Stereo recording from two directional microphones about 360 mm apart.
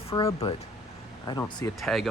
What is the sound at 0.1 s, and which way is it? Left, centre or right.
Speech, centre.